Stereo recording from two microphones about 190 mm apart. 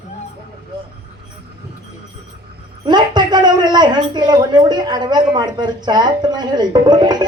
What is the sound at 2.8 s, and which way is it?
Speech, 25° right (ahead or behind).